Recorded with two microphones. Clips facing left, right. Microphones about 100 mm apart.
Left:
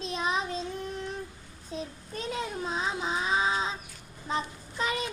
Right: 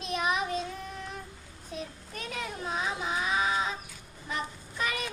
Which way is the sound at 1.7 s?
30° left (ahead or behind).